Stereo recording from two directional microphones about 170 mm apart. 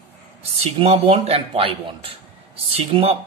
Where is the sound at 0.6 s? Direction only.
35° right (ahead or behind).